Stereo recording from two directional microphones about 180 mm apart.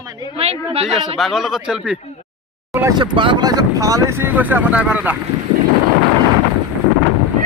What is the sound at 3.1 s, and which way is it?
Speech, 25° right (ahead or behind).